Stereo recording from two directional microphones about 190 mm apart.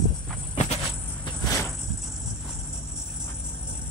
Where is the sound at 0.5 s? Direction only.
35° left (ahead or behind).